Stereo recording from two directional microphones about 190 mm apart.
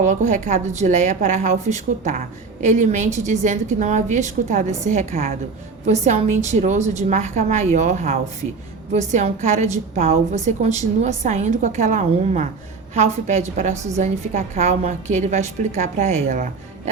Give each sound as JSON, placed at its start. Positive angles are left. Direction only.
{"t": 0.0, "sound": "a woman's voice", "side_deg": -40}